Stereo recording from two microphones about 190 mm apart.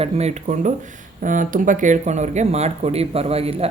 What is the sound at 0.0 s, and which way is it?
Speech, 35° right (ahead or behind).